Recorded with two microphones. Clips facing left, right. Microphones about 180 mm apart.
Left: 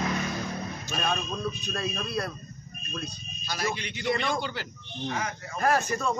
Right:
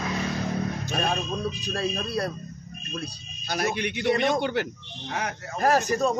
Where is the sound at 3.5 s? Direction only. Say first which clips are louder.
Right 5 dB; 60° right (ahead or behind).